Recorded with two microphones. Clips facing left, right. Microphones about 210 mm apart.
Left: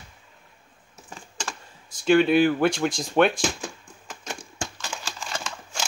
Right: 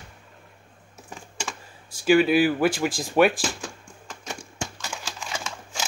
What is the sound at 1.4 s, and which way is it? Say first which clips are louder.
Speech: even; 5° right (ahead or behind).